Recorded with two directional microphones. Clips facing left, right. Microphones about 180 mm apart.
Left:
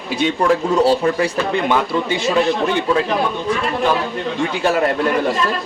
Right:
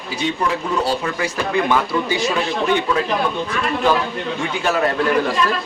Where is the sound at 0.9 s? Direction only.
35° left (ahead or behind).